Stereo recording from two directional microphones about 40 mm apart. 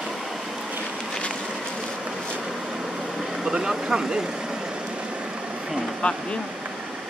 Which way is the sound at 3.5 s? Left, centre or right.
Centre.